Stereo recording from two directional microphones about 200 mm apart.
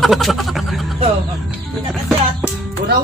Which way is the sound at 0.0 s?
Centre (ahead or behind).